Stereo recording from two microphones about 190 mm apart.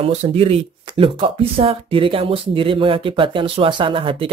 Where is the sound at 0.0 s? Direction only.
30° right (ahead or behind).